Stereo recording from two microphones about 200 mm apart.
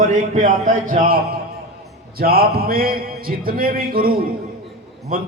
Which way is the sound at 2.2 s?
50° right (ahead or behind).